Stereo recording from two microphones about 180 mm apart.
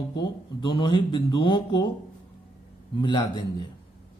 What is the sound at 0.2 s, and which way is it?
Speech, 25° left (ahead or behind).